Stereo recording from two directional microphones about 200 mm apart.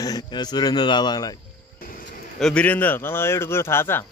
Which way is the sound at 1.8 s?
45° left (ahead or behind).